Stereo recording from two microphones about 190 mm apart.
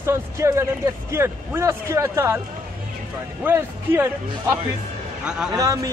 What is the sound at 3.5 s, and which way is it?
A man's voice, 10° right (ahead or behind).